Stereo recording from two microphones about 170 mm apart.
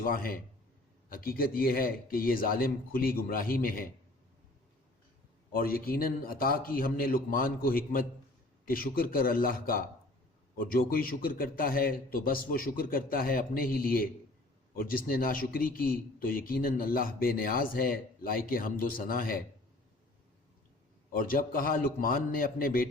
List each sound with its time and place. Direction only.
0.0 s speech: 55° left (ahead or behind)
5.5 s speech: 60° left (ahead or behind)
21.1 s speech: 55° left (ahead or behind)